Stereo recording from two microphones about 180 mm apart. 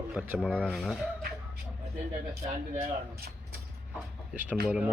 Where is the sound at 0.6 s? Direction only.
Centre (ahead or behind).